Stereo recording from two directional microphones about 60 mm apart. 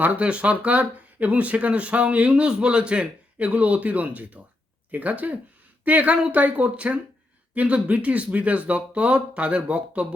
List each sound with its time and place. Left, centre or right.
0.0 s speech: right